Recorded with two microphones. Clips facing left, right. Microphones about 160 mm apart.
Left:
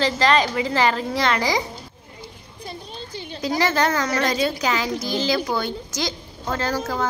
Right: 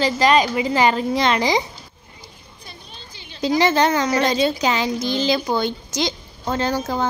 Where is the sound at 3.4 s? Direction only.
20° right (ahead or behind).